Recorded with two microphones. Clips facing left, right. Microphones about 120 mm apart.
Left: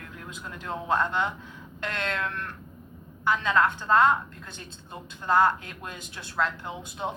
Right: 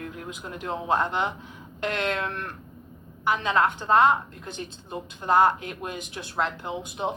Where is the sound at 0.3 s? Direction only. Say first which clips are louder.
Right 2 dB; 20° right (ahead or behind).